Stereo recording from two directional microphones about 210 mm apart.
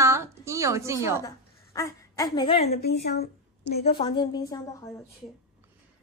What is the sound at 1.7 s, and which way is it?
Speech, 15° left (ahead or behind).